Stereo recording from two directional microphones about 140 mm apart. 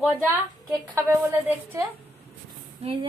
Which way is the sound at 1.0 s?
15° right (ahead or behind).